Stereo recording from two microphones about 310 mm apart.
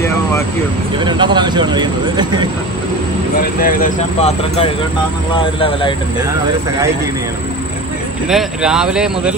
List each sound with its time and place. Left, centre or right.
0.9 s speech: centre
3.3 s speech: left
8.3 s speech: centre